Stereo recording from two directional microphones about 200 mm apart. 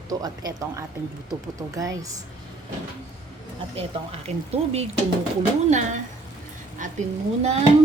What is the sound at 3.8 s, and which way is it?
Speech, 30° right (ahead or behind).